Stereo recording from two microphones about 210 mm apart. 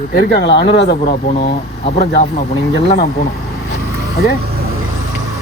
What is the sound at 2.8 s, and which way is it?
Speech, 50° left (ahead or behind).